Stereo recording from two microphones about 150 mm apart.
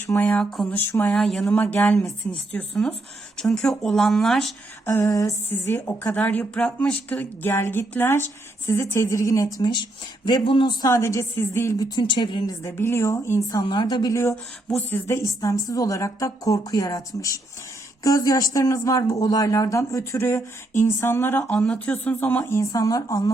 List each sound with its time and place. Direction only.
0.1 s a woman's voice: 10° left (ahead or behind)
4.9 s a woman's voice: 20° left (ahead or behind)
11.9 s a woman's voice: 35° left (ahead or behind)